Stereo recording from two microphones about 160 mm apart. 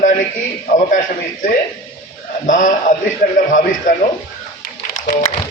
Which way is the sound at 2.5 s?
50° left (ahead or behind).